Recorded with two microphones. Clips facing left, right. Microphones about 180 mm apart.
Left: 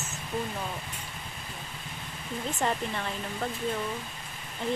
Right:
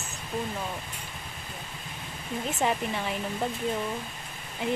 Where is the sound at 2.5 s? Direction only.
5° right (ahead or behind).